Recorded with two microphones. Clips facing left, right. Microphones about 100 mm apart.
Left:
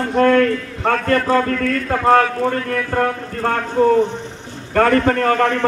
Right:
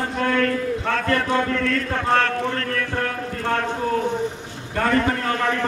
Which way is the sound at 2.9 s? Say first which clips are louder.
Left 9 dB; 50° left (ahead or behind).